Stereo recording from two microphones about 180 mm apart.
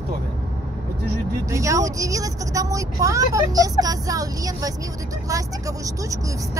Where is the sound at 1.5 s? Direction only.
15° right (ahead or behind).